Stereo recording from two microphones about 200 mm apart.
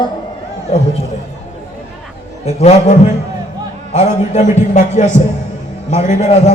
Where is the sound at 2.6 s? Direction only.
35° left (ahead or behind).